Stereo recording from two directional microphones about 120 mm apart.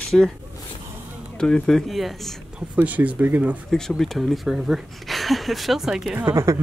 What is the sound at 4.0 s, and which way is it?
Speech, centre (ahead or behind).